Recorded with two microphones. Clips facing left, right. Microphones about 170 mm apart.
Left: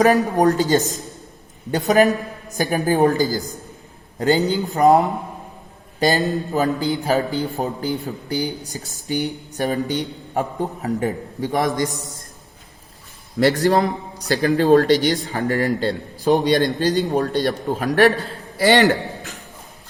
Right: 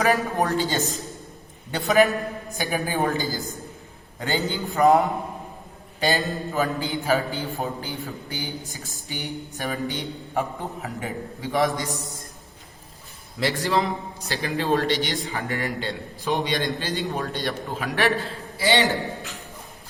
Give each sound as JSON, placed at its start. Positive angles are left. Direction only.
{"t": 0.3, "sound": "a woman's voice", "side_deg": 40}
{"t": 13.7, "sound": "a man's voice", "side_deg": 40}
{"t": 18.6, "sound": "a man's voice", "side_deg": 60}